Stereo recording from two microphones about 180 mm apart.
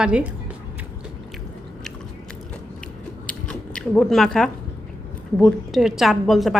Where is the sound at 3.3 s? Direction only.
5° left (ahead or behind).